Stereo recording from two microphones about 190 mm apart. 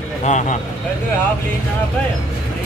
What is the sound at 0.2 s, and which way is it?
Speech, 40° left (ahead or behind).